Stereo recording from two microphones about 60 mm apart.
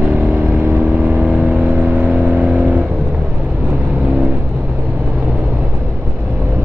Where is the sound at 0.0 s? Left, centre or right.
Right.